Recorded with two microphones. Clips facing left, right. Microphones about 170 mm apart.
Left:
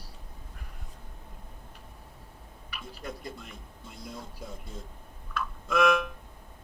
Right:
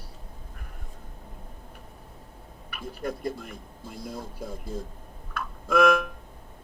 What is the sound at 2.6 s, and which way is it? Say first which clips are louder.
Speech: right 7 dB; 50° right (ahead or behind).